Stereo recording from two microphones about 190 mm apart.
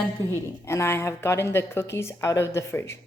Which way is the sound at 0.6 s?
15° left (ahead or behind).